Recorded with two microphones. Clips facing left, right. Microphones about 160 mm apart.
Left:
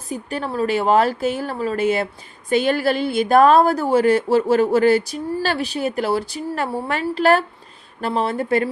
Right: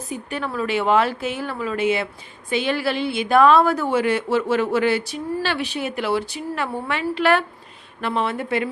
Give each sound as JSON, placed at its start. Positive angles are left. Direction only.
{"t": 0.1, "sound": "a woman's voice", "side_deg": 35}